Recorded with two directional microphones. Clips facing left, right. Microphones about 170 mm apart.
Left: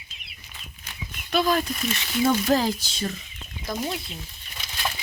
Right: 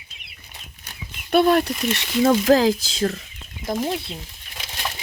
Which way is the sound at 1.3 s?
60° right (ahead or behind).